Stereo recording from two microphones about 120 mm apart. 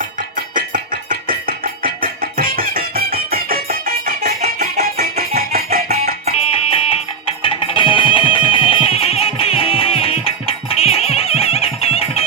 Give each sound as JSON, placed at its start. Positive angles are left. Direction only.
{"t": 5.9, "sound": "music", "side_deg": -65}
{"t": 6.3, "sound": "music", "side_deg": 55}